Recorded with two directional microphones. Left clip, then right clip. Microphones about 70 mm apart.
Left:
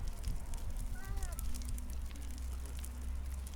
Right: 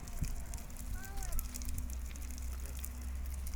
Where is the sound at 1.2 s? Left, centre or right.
Centre.